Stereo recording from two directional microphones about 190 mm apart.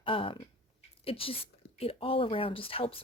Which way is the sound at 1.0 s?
30° left (ahead or behind).